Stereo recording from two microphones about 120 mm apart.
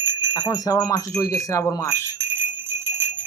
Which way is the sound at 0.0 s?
20° right (ahead or behind).